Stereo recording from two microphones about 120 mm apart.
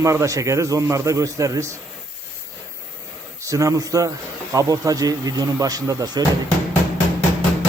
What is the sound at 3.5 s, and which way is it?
A man's voice, 30° right (ahead or behind).